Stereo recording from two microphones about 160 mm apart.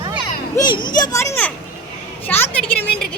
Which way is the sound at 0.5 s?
30° left (ahead or behind).